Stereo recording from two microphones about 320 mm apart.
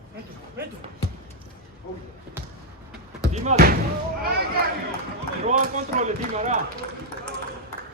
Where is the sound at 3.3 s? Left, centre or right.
Right.